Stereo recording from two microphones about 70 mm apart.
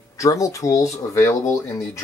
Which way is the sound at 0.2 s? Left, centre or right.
Left.